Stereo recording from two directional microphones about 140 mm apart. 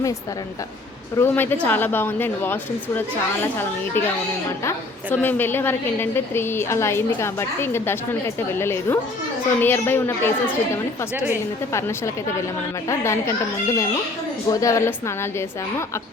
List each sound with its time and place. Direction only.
1.1 s a woman's voice: 15° left (ahead or behind)
5.1 s a woman's voice: 15° left (ahead or behind)
11.7 s a child's voice: 20° left (ahead or behind)